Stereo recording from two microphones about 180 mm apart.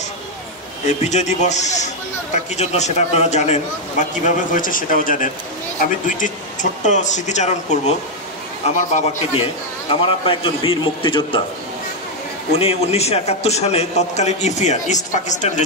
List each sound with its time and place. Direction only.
0.8 s a man's voice: 40° left (ahead or behind)
4.4 s a man's voice: 50° left (ahead or behind)
9.8 s a man's voice: 30° left (ahead or behind)
12.5 s a man's voice: 35° left (ahead or behind)